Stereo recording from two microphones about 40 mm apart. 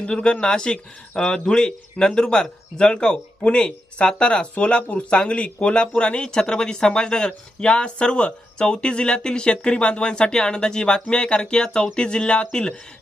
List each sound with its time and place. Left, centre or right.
0.0 s speech: left